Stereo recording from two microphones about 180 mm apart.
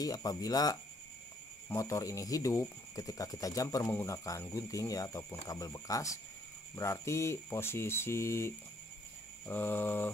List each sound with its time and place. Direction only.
0.0 s speech: 20° left (ahead or behind)